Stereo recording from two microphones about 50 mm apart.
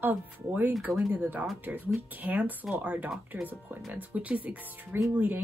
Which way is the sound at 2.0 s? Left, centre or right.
Right.